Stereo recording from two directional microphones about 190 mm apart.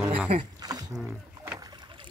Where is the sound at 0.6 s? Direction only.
20° right (ahead or behind).